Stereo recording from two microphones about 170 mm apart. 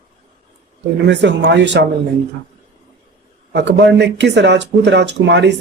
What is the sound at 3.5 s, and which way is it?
Speech, 85° right.